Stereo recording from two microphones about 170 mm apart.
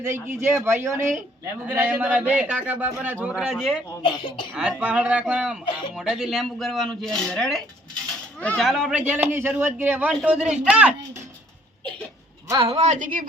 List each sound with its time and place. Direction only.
0.3 s a man's voice: 15° right (ahead or behind)
3.8 s speech: 30° left (ahead or behind)
4.5 s a man's voice: 5° right (ahead or behind)
12.5 s speech: 30° right (ahead or behind); by 13.2 s 50° right (ahead or behind)